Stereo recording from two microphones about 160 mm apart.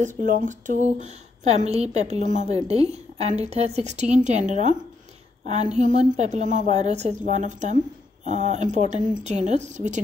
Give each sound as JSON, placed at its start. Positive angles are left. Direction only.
{"t": 0.0, "sound": "a woman's voice", "side_deg": -50}